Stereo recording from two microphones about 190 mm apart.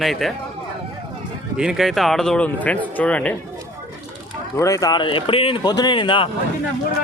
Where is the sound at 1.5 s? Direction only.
Centre (ahead or behind).